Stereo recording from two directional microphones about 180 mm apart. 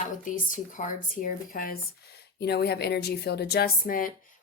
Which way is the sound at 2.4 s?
65° left (ahead or behind).